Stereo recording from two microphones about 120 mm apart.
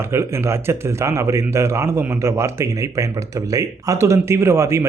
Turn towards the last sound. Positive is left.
turn(degrees=-20)  # may be behind; listen again after turning